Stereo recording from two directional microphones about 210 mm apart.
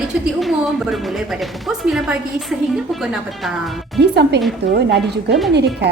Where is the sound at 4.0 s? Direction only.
55° right (ahead or behind).